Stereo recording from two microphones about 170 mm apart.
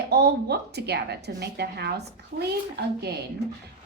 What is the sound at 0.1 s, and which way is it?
A woman's voice, 70° right (ahead or behind).